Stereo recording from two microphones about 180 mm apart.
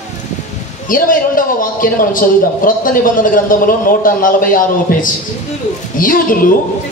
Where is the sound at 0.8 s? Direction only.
50° left (ahead or behind).